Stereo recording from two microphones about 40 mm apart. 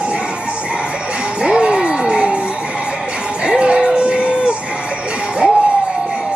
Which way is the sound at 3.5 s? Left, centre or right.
Right.